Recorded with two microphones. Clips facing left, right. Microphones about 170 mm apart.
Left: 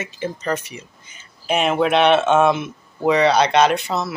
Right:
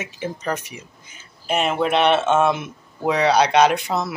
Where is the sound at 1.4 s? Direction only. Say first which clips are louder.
Left 2 dB; centre (ahead or behind).